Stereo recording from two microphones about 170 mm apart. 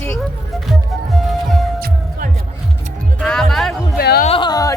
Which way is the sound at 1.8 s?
55° right (ahead or behind).